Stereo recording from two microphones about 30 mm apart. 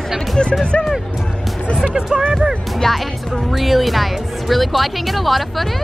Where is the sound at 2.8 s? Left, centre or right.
Centre.